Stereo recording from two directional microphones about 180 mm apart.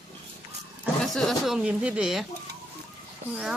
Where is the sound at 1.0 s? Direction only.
Centre (ahead or behind).